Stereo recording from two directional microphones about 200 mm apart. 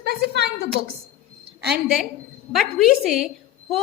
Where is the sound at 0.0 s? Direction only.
55° right (ahead or behind).